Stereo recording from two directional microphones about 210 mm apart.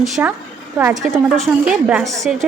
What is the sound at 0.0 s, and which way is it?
A woman's voice, 10° right (ahead or behind).